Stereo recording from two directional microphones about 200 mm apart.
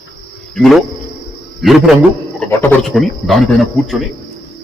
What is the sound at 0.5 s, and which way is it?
A man's voice, centre (ahead or behind).